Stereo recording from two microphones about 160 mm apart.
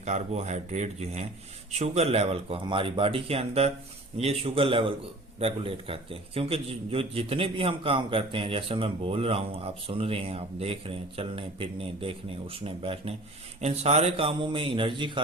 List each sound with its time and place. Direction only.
0.0 s a man's voice: 45° right (ahead or behind); by 15.2 s 30° right (ahead or behind)